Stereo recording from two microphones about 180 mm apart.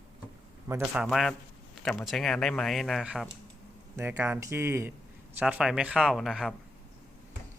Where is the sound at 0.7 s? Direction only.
15° right (ahead or behind).